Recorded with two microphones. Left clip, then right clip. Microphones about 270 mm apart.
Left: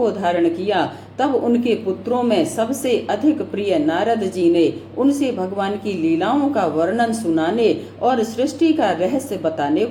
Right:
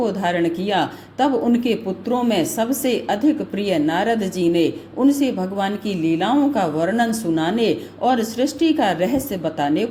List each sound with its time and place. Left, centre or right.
0.0 s speech: right